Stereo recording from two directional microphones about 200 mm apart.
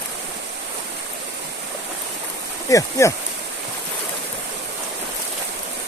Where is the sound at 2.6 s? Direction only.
15° left (ahead or behind).